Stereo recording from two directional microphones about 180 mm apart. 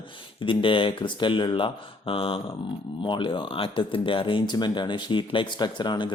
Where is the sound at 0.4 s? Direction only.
30° left (ahead or behind).